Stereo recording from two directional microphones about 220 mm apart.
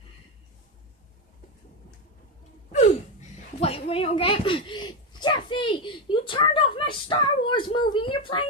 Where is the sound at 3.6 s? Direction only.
25° left (ahead or behind).